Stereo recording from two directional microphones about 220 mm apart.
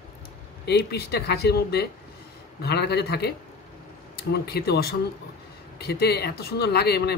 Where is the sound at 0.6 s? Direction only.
50° left (ahead or behind).